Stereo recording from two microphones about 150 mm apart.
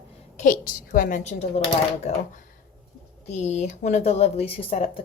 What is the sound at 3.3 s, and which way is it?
Speech, 50° left (ahead or behind).